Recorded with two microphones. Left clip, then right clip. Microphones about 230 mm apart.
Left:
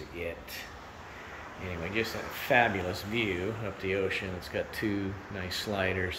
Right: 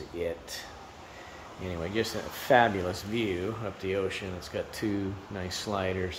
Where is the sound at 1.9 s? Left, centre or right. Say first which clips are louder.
Even; right.